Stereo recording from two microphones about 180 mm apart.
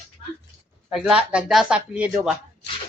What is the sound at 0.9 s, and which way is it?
Speech, 5° right (ahead or behind).